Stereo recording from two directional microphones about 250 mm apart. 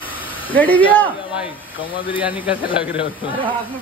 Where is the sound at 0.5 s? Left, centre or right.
Centre.